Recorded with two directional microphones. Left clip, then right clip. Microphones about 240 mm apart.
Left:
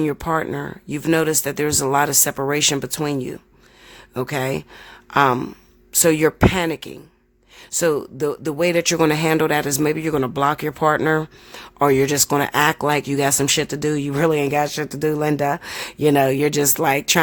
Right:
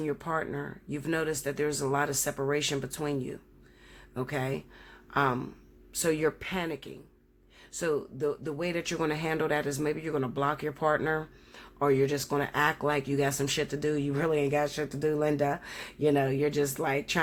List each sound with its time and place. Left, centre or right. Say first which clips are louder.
0.0 s speech: left 11 dB; left